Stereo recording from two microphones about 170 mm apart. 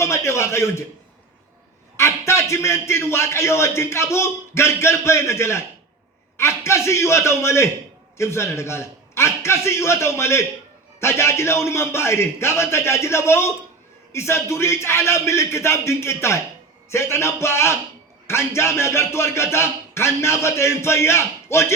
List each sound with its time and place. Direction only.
0.0 s a man's voice: 15° left (ahead or behind)
2.0 s a man's voice: 15° left (ahead or behind)